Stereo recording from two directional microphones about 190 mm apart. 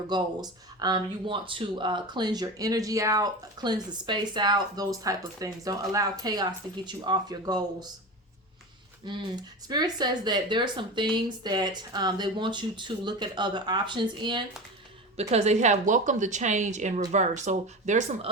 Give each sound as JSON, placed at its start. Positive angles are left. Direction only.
{"t": 0.1, "sound": "speech", "side_deg": -20}
{"t": 9.0, "sound": "speech", "side_deg": -20}
{"t": 15.1, "sound": "speech", "side_deg": -35}